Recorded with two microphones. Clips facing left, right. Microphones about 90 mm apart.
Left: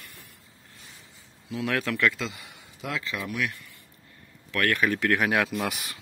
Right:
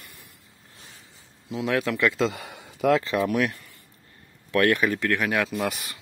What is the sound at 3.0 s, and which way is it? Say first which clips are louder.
Speech: right 7 dB; 40° right (ahead or behind).